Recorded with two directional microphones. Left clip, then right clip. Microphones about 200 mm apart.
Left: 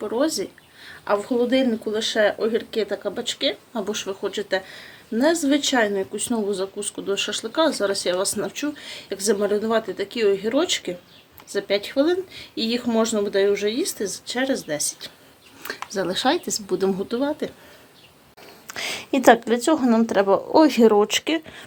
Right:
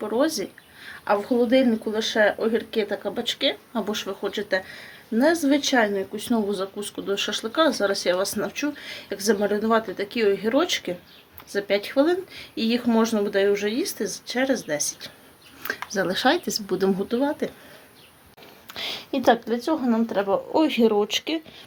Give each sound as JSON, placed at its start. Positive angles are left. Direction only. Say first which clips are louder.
{"t": 0.0, "sound": "speech", "louder": "even", "side_deg": 0}
{"t": 18.7, "sound": "a sound", "louder": "left 4 dB", "side_deg": 20}
{"t": 19.2, "sound": "speech", "louder": "left 5 dB", "side_deg": 45}